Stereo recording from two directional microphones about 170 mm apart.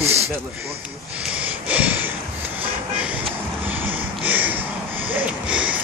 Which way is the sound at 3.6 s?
10° right (ahead or behind).